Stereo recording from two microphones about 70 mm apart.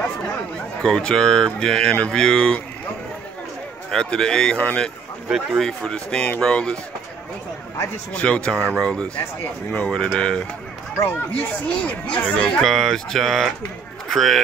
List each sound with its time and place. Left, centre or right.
0.8 s speech: centre
3.9 s speech: centre
5.3 s a sound: centre
5.7 s speech: centre
8.1 s speech: centre
11.1 s speech: left
12.6 s a sound: centre
14.0 s speech: centre